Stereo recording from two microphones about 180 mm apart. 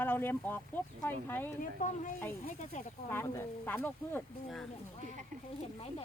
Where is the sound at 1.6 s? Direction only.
45° left (ahead or behind).